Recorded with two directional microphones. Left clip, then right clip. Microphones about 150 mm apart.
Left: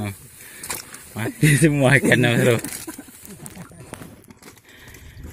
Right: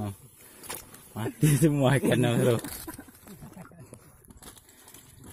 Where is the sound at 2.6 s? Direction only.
10° left (ahead or behind).